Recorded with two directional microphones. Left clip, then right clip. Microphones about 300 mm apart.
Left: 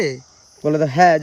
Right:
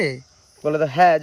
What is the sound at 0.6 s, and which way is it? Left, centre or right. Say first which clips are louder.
Speech: left 2 dB; left.